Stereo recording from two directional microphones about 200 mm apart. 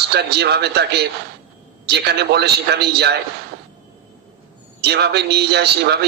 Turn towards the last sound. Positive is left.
turn(degrees=-55)  # may be behind; listen again after turning